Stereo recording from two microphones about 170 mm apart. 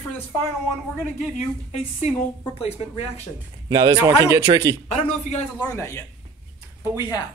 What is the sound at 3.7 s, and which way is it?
A man's voice, 20° right (ahead or behind).